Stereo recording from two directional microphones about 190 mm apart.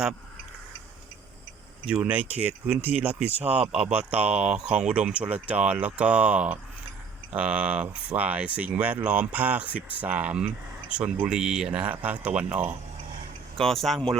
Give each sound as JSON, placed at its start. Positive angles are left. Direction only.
{"t": 1.9, "sound": "speech", "side_deg": -5}
{"t": 3.3, "sound": "speech", "side_deg": -35}
{"t": 3.6, "sound": "speech", "side_deg": -5}